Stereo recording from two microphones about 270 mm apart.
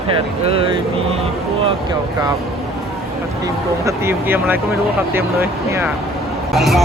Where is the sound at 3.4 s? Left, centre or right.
Centre.